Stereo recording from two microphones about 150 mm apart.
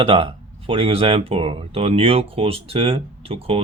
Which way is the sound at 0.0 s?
40° right (ahead or behind).